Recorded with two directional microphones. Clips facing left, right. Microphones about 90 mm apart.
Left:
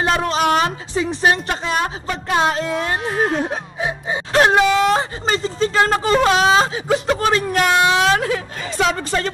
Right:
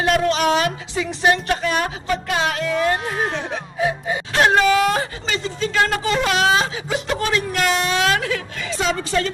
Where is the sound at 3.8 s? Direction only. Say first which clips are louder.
Right 3 dB; 25° left (ahead or behind).